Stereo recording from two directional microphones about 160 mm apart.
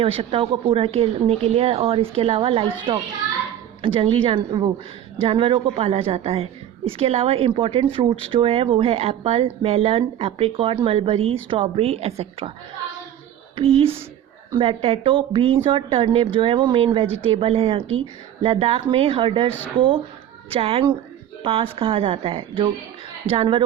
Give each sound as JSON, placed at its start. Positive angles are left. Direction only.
{"t": 0.0, "sound": "a woman's voice", "side_deg": -35}
{"t": 13.6, "sound": "a woman's voice", "side_deg": -35}
{"t": 20.5, "sound": "a woman's voice", "side_deg": -35}